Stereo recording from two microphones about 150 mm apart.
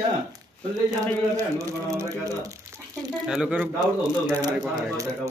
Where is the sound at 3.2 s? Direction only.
5° right (ahead or behind).